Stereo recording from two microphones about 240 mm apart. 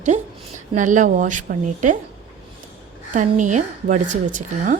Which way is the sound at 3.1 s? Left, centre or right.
Right.